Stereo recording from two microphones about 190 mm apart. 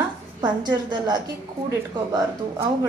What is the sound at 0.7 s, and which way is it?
A woman's voice, 25° right (ahead or behind).